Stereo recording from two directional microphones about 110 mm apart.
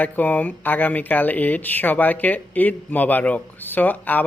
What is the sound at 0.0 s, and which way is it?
Speech, 15° left (ahead or behind).